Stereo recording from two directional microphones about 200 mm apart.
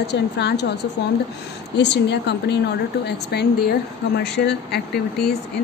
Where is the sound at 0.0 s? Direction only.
55° left (ahead or behind).